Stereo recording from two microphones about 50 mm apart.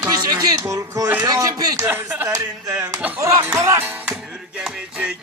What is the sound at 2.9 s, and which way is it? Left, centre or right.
Music, right.